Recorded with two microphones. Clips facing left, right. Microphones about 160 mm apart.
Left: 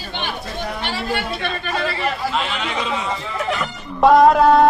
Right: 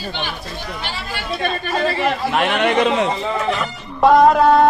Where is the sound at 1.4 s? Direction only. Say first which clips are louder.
Right 3 dB; 40° right (ahead or behind).